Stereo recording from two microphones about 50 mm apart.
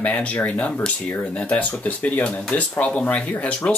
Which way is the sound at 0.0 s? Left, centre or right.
Left.